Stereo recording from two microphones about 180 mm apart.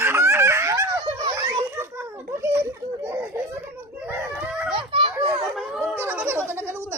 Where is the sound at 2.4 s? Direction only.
15° right (ahead or behind).